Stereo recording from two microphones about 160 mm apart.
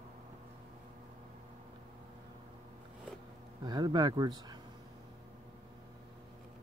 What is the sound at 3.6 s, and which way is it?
Speech, 25° right (ahead or behind).